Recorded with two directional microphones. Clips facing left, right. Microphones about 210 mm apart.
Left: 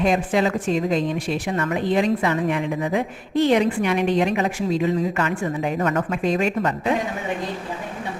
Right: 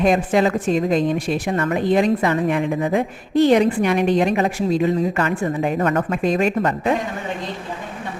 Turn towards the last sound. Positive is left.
turn(degrees=-50)  # may be behind; listen again after turning